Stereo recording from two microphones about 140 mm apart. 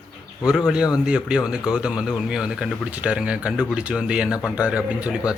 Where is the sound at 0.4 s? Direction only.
5° right (ahead or behind).